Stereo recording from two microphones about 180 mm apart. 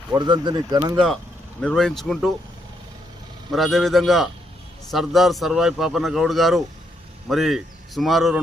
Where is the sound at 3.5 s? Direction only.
Centre (ahead or behind).